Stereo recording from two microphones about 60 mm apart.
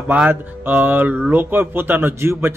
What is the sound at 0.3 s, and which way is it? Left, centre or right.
A man's voice, right.